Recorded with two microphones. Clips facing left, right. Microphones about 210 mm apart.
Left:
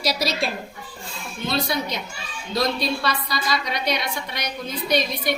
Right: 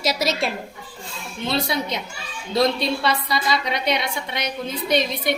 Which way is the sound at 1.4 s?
25° right (ahead or behind).